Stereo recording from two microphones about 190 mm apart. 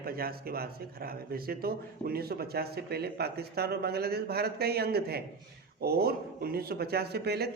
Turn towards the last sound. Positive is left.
turn(degrees=-55)  # may be behind; listen again after turning